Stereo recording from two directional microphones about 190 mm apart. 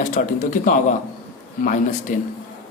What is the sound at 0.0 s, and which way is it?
Speech, 40° left (ahead or behind).